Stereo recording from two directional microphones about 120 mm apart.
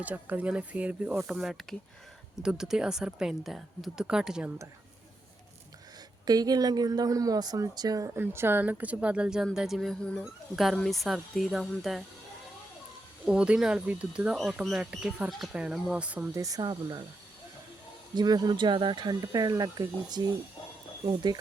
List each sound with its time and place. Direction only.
0.0 s a woman's voice: 15° right (ahead or behind)
6.2 s a woman's voice: 35° right (ahead or behind); by 12.0 s centre (ahead or behind)
13.2 s speech: 10° right (ahead or behind)
16.3 s speech: 30° right (ahead or behind)
18.1 s speech: 35° right (ahead or behind)